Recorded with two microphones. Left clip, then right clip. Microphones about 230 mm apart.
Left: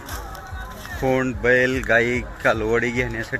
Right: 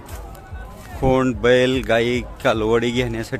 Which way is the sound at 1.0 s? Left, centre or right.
Right.